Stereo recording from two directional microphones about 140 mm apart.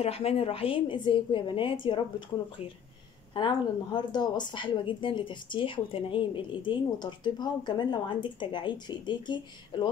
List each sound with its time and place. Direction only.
0.0 s a woman's voice: 45° left (ahead or behind)
3.3 s a woman's voice: 30° left (ahead or behind)